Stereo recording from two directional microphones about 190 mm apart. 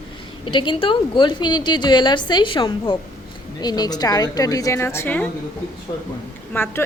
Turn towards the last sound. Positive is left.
turn(degrees=10)  # may be behind; listen again after turning